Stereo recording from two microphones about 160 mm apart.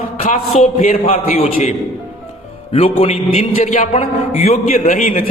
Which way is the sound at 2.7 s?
35° left (ahead or behind).